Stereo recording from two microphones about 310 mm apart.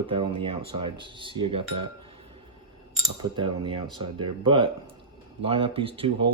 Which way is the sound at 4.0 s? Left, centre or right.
Centre.